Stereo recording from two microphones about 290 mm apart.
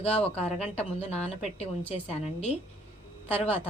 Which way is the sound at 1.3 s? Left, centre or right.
Left.